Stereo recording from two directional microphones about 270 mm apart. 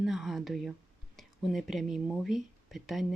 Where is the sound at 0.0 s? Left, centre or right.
Centre.